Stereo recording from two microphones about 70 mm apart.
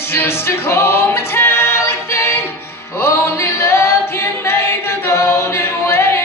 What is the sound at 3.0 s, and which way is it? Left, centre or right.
A capella, left.